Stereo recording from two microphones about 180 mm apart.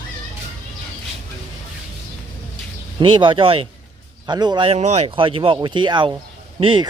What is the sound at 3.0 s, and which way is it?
Speech, 25° right (ahead or behind).